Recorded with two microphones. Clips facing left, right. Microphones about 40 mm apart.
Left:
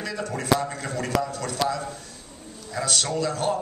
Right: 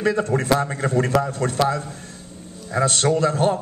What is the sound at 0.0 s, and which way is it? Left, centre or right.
A man's voice, right.